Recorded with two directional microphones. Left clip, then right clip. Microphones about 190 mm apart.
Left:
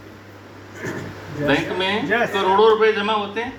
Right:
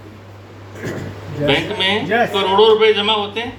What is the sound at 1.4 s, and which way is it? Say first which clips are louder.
A man's voice: right 4 dB; 40° right (ahead or behind).